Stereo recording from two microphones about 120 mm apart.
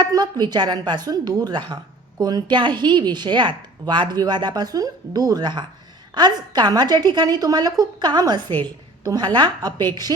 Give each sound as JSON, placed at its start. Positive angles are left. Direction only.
{"t": 0.0, "sound": "a woman's voice", "side_deg": -35}